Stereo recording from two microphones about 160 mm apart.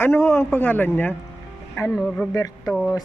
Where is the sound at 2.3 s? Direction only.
20° left (ahead or behind).